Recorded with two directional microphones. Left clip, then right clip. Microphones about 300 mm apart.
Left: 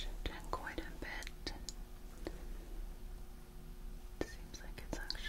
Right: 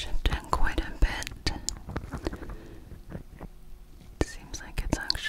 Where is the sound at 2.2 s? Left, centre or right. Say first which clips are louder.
Right 11 dB; right.